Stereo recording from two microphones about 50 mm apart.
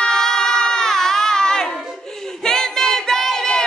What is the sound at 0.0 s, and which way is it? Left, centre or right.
Baby cry, centre.